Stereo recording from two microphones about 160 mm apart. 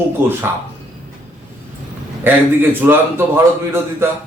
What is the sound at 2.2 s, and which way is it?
A man's voice, 10° right (ahead or behind).